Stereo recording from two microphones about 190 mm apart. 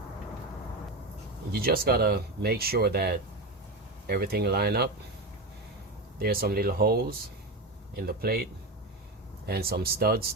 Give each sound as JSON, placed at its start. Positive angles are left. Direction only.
{"t": 1.5, "sound": "speech", "side_deg": -50}
{"t": 6.1, "sound": "speech", "side_deg": -55}
{"t": 9.5, "sound": "speech", "side_deg": -55}